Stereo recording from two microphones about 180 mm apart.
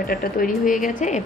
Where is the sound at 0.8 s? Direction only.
40° left (ahead or behind).